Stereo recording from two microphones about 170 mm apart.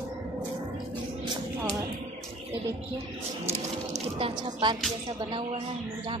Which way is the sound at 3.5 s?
35° right (ahead or behind).